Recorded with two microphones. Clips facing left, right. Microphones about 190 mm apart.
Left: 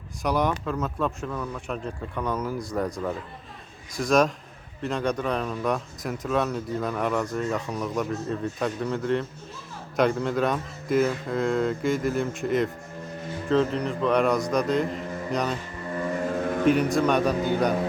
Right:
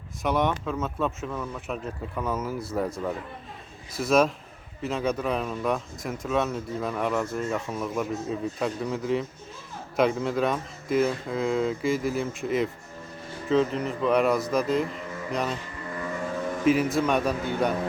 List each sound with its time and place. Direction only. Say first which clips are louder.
0.2 s speech: even; centre (ahead or behind)
3.9 s speech: even; 5° right (ahead or behind)
16.3 s music: left 4 dB; 60° left (ahead or behind)
16.6 s speech: left 1 dB; centre (ahead or behind)